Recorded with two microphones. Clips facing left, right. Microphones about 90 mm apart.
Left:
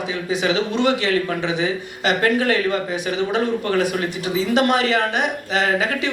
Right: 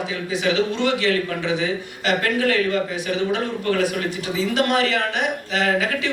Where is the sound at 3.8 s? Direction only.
20° left (ahead or behind).